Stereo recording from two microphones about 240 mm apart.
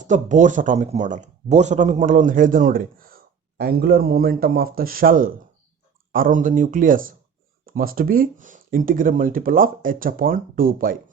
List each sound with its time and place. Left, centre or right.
0.0 s speech: right